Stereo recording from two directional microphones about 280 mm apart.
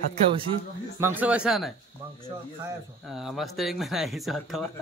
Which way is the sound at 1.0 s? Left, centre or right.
Centre.